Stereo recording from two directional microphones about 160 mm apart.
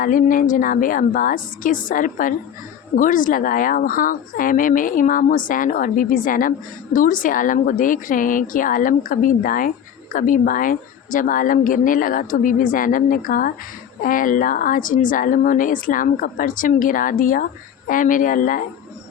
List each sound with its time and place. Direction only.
0.0 s a woman's voice: 55° left (ahead or behind)